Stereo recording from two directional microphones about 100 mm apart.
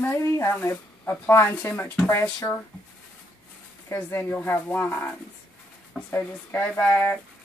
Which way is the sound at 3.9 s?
20° left (ahead or behind).